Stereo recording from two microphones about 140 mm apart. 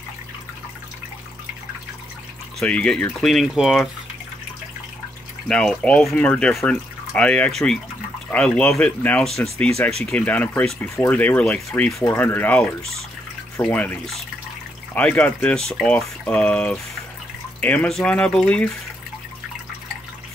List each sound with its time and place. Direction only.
2.6 s speech: 5° left (ahead or behind)
5.5 s speech: 5° left (ahead or behind)
15.0 s speech: 10° left (ahead or behind)